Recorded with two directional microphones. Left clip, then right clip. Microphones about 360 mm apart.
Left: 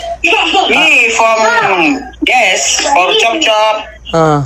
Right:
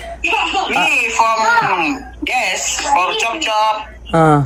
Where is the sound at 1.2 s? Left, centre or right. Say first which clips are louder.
Left 4 dB; left.